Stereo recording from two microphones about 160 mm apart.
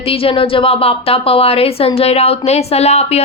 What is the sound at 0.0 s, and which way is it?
A woman's voice, 35° left (ahead or behind).